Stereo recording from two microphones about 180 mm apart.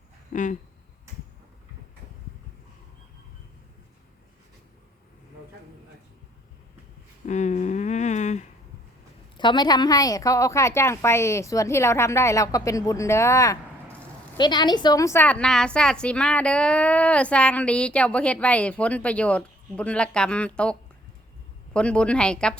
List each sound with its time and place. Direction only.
0.3 s speech: 45° left (ahead or behind)
7.3 s a sound: 40° left (ahead or behind)
9.4 s a woman's voice: 25° left (ahead or behind); by 22.5 s 5° left (ahead or behind)